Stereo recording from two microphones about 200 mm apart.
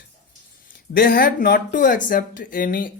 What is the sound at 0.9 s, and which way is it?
Speech, 45° left (ahead or behind).